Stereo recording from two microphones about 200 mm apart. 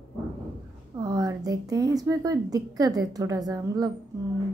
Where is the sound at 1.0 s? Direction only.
20° right (ahead or behind).